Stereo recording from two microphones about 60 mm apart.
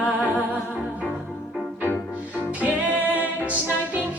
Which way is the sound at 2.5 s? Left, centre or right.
Right.